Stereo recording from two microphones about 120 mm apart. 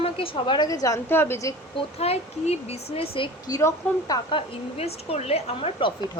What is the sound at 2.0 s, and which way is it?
A woman's voice, 60° left (ahead or behind).